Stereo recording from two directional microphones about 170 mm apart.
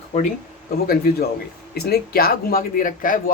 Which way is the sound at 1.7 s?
65° left (ahead or behind).